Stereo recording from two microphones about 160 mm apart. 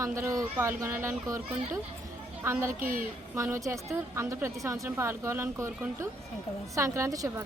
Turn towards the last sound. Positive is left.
turn(degrees=-20)  # may be behind; listen again after turning